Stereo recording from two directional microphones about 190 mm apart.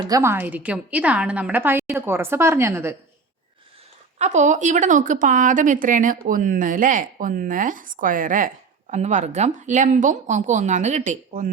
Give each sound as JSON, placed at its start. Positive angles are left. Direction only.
{"t": 0.1, "sound": "a woman's voice", "side_deg": -15}
{"t": 4.2, "sound": "speech", "side_deg": -40}